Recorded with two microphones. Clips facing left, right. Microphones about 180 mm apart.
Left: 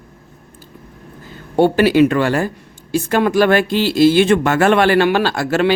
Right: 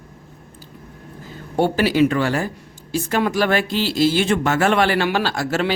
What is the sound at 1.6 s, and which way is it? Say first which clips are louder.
Speech: left 5 dB; 60° left (ahead or behind).